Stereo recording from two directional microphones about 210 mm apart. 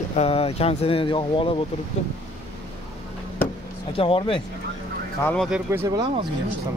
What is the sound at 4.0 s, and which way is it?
Speech, 25° left (ahead or behind).